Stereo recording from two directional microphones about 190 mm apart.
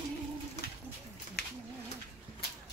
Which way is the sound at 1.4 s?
55° left (ahead or behind).